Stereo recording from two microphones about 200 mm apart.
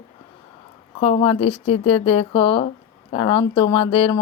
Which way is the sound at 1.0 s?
30° left (ahead or behind).